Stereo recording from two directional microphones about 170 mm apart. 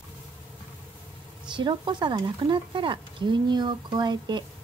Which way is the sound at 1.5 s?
30° right (ahead or behind).